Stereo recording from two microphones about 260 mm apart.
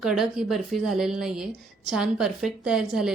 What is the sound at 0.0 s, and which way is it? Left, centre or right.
A woman's voice, centre.